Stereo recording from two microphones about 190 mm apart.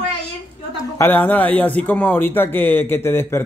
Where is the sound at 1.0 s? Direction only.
10° left (ahead or behind).